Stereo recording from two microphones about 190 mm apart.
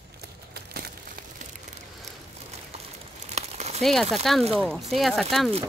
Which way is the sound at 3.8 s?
Centre (ahead or behind).